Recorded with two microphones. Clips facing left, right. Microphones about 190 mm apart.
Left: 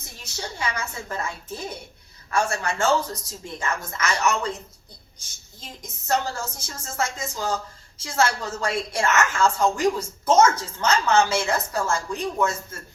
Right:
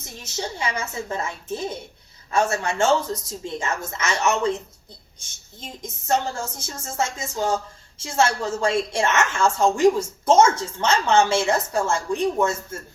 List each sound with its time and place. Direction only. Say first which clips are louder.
0.2 s a woman's voice: right 3 dB; 25° right (ahead or behind)
5.5 s a woman's voice: right 5 dB; 25° right (ahead or behind)